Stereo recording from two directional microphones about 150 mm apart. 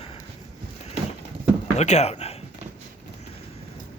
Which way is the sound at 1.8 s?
50° left (ahead or behind).